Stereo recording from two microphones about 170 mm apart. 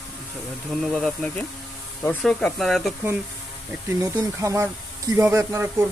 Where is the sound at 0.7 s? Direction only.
Centre (ahead or behind).